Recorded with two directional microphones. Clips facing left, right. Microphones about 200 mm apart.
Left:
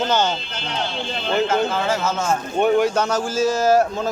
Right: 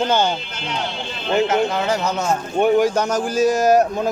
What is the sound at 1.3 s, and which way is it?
Speech, 20° right (ahead or behind).